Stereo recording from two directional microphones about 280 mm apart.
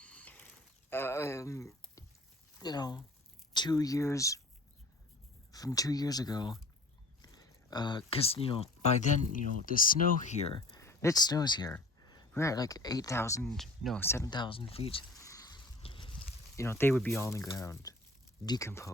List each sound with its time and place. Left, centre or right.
0.0 s pulleys: centre
0.9 s a sound: centre
2.6 s speech: centre
5.5 s speech: centre
10.8 s speech: centre